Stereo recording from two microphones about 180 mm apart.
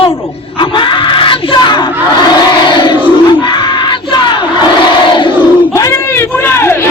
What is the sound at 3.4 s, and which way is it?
Battle cry, 25° left (ahead or behind).